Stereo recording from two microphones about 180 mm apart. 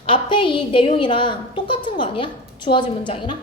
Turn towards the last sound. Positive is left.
turn(degrees=25)  # may be behind; listen again after turning